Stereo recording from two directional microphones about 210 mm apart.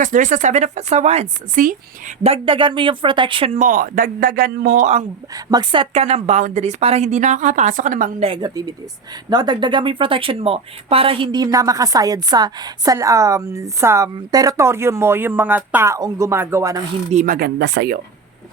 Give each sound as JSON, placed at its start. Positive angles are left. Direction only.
{"t": 0.0, "sound": "a woman's voice", "side_deg": -35}
{"t": 5.5, "sound": "a woman's voice", "side_deg": -20}
{"t": 8.3, "sound": "speech", "side_deg": -20}
{"t": 17.1, "sound": "speech", "side_deg": -35}